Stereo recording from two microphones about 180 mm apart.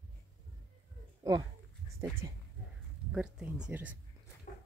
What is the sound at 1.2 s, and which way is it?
Speech, 20° right (ahead or behind).